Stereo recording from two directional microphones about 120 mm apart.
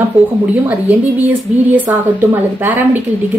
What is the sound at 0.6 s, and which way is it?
A woman's voice, 15° right (ahead or behind).